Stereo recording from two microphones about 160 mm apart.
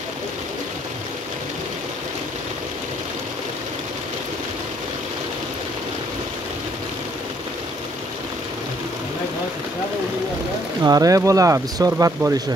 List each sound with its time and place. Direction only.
10.8 s speech: 20° right (ahead or behind)